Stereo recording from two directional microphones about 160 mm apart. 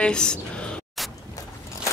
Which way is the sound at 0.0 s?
5° left (ahead or behind).